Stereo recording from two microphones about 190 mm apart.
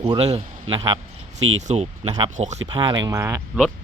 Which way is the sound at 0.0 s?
30° right (ahead or behind).